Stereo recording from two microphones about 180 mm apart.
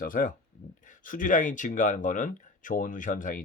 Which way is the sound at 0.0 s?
50° left (ahead or behind).